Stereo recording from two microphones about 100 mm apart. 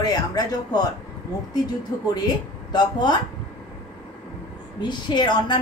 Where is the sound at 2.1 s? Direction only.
45° left (ahead or behind).